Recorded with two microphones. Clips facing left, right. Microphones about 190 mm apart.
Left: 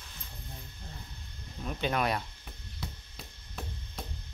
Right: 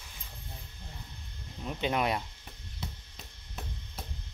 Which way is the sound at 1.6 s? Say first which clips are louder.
Even; 15° right (ahead or behind).